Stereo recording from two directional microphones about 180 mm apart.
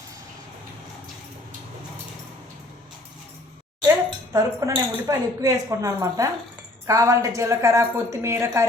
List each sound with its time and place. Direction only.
3.8 s a woman's voice: 20° right (ahead or behind)